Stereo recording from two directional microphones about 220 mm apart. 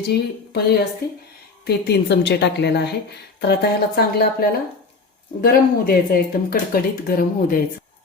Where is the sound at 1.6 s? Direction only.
50° left (ahead or behind).